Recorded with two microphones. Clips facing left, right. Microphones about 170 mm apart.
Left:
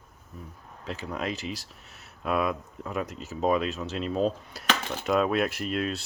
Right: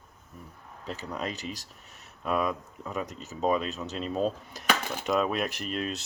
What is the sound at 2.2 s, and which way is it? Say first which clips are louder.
Speech: left 1 dB; 5° left (ahead or behind).